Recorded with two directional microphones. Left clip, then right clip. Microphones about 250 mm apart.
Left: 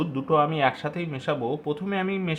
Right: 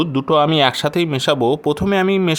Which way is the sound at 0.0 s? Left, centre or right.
Right.